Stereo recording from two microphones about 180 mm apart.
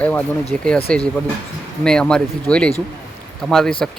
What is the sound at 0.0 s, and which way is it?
Speech, 5° left (ahead or behind).